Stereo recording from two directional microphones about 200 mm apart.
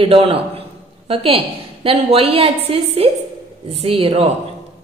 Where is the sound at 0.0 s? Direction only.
30° right (ahead or behind).